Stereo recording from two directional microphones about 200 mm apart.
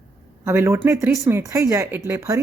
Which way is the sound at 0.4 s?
15° right (ahead or behind).